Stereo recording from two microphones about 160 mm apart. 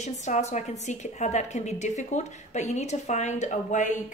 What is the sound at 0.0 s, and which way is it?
A woman's voice, 45° left (ahead or behind).